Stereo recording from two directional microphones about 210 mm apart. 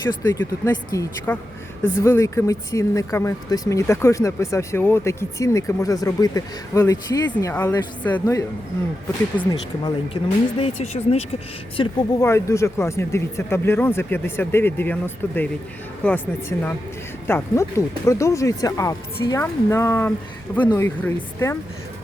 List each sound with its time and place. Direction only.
0.2 s speech: 15° left (ahead or behind); by 11.3 s 30° left (ahead or behind)
11.8 s speech: 15° left (ahead or behind)